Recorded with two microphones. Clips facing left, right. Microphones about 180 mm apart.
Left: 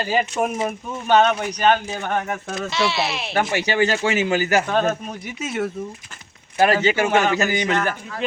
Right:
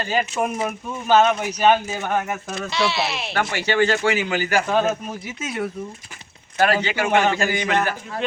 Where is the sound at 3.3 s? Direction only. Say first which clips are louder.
Left 1 dB; 20° left (ahead or behind).